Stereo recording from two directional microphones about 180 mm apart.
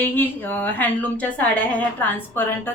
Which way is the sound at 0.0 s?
10° left (ahead or behind).